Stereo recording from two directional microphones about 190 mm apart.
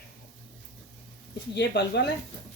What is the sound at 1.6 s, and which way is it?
Speech, 60° left (ahead or behind).